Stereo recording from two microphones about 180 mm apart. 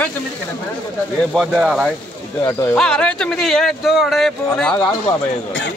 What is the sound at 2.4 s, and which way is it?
Speech, 15° left (ahead or behind).